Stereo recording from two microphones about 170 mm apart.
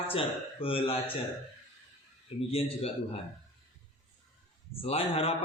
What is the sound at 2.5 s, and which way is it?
Speech, 35° left (ahead or behind).